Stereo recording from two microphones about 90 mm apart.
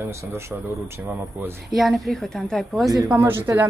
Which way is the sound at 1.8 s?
Centre (ahead or behind).